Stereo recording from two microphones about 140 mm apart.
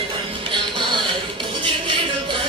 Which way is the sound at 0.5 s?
35° right (ahead or behind).